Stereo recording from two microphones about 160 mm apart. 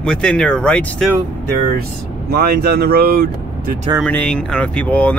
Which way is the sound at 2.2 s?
75° right (ahead or behind).